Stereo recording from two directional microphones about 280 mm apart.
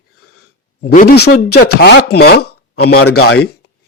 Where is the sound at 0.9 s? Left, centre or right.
Left.